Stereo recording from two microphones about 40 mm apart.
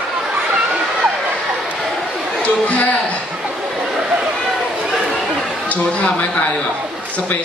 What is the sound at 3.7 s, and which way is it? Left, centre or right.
Chatter, centre.